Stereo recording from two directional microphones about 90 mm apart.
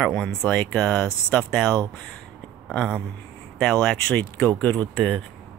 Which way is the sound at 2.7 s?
10° left (ahead or behind).